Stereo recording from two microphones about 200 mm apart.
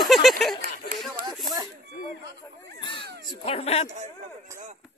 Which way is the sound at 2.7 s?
25° left (ahead or behind).